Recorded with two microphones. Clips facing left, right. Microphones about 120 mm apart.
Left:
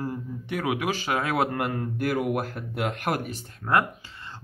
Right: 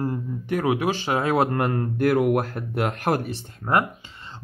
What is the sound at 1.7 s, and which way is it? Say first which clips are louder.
Speech: right 6 dB; 55° right (ahead or behind).